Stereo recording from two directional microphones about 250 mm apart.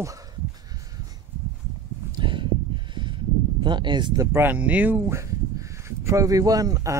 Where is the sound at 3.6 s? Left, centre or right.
Centre.